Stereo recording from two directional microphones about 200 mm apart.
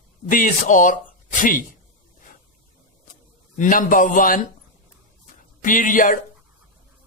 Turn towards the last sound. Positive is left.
turn(degrees=40)  # may be behind; listen again after turning